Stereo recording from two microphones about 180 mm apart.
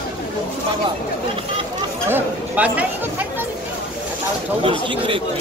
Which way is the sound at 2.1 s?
10° right (ahead or behind).